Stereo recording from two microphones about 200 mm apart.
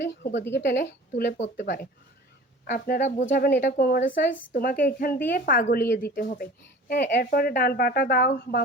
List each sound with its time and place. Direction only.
0.5 s a woman's voice: 60° left (ahead or behind)
2.6 s speech: 50° left (ahead or behind)